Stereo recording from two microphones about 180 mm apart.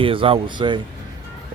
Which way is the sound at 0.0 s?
30° right (ahead or behind).